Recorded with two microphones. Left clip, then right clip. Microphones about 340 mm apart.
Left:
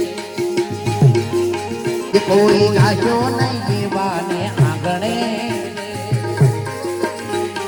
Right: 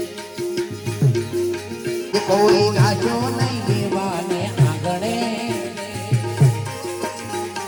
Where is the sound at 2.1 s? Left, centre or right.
Right.